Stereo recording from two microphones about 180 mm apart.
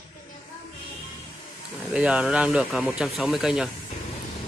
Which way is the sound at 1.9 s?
5° right (ahead or behind).